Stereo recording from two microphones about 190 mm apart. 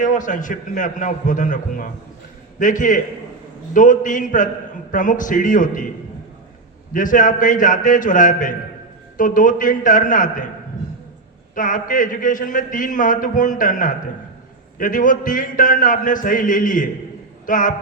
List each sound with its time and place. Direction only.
0.0 s a man's voice: 40° left (ahead or behind)
6.9 s a man's voice: 45° left (ahead or behind)
11.5 s a man's voice: 45° left (ahead or behind)